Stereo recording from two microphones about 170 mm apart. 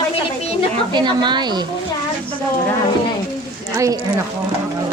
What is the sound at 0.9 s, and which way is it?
Speech, 25° right (ahead or behind).